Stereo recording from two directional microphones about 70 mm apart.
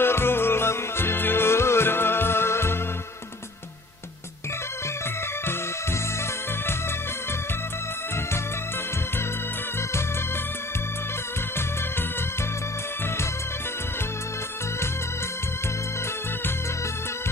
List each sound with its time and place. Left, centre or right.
0.0 s music: left